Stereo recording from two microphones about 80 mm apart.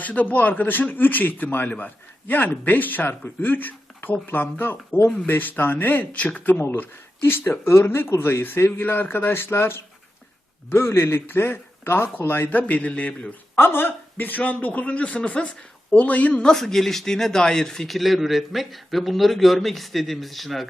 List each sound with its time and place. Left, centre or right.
0.0 s a man's voice: left; by 20.7 s centre